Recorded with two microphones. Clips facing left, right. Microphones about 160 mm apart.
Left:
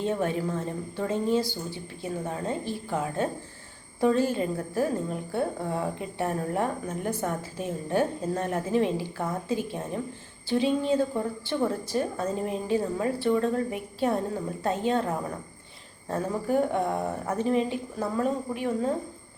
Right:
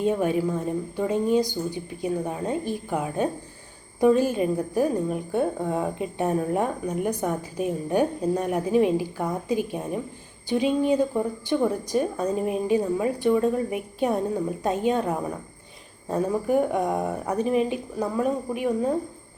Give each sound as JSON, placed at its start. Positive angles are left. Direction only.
{"t": 0.0, "sound": "a woman's voice", "side_deg": -15}